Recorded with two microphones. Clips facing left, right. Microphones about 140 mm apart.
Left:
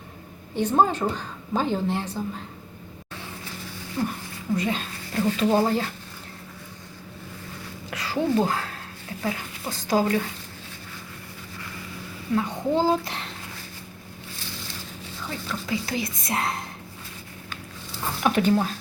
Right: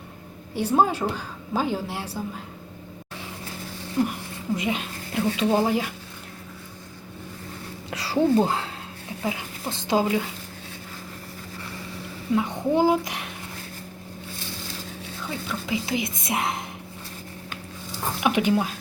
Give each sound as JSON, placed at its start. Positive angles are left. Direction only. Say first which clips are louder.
{"t": 0.5, "sound": "a woman's voice", "louder": "even", "side_deg": -10}
{"t": 4.0, "sound": "a woman's voice", "louder": "right 4 dB", "side_deg": -15}
{"t": 7.9, "sound": "speech", "louder": "right 4 dB", "side_deg": -30}
{"t": 12.3, "sound": "a woman's voice", "louder": "right 1 dB", "side_deg": -15}
{"t": 15.3, "sound": "speech", "louder": "right 1 dB", "side_deg": -15}
{"t": 18.2, "sound": "speech", "louder": "left 1 dB", "side_deg": -15}